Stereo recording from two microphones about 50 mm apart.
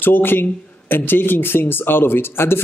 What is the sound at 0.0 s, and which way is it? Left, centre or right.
Speech, left.